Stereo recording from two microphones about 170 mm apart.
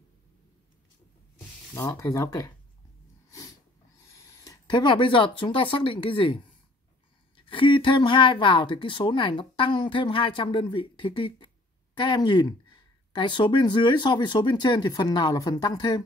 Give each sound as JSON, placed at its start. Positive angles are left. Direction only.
{"t": 1.7, "sound": "a woman's voice", "side_deg": 20}
{"t": 3.3, "sound": "dog", "side_deg": 20}
{"t": 4.1, "sound": "a woman's voice", "side_deg": 20}